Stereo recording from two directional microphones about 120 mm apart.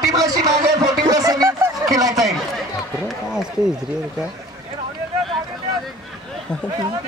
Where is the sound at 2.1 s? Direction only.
Centre (ahead or behind).